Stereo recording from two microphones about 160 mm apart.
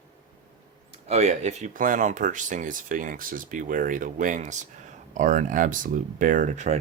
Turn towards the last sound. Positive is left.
turn(degrees=-50)  # may be behind; listen again after turning